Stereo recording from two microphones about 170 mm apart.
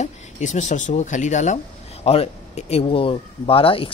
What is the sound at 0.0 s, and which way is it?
Speech, 45° left (ahead or behind).